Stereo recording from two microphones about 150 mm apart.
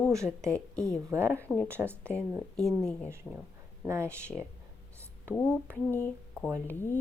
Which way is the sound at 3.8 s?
15° right (ahead or behind).